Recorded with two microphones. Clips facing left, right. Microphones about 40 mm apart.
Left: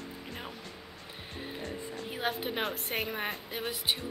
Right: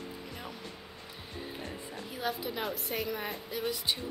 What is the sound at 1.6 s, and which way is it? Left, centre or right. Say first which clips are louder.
Speech: left 2 dB; centre.